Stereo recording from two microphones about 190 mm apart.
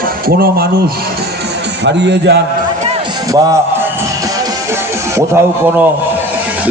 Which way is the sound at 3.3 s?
15° right (ahead or behind).